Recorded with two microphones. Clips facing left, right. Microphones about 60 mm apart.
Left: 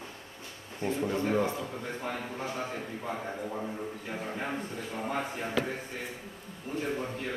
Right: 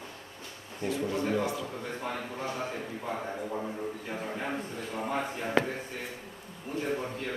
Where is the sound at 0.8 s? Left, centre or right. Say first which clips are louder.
Left 1 dB; left.